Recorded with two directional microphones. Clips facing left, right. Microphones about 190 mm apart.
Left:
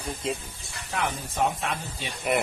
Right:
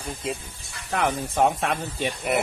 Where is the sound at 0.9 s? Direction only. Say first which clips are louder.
Right 5 dB; 55° right (ahead or behind).